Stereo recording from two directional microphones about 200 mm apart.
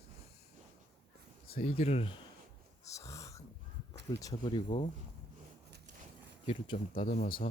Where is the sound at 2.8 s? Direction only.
15° left (ahead or behind).